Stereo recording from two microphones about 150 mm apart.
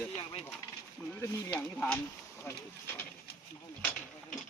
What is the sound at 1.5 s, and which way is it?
Speech, 5° left (ahead or behind).